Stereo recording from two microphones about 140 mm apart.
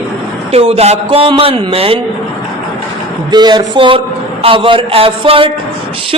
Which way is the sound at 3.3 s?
30° right (ahead or behind).